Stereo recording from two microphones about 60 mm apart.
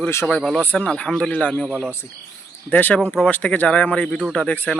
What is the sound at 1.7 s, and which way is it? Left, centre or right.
Speech, centre.